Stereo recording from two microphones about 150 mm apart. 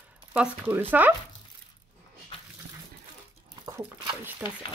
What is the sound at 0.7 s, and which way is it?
Speech, 15° right (ahead or behind).